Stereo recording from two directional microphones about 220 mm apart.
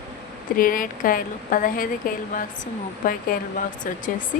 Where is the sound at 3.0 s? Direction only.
40° left (ahead or behind).